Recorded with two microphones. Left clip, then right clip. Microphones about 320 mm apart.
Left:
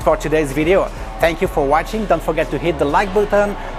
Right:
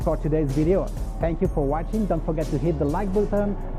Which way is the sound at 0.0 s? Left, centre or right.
Centre.